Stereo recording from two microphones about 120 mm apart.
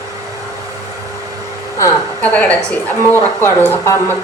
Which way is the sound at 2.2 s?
10° left (ahead or behind).